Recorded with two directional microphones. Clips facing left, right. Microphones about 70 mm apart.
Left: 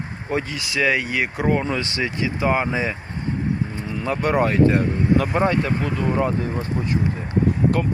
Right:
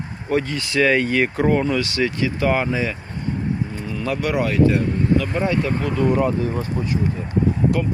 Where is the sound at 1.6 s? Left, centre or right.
Left.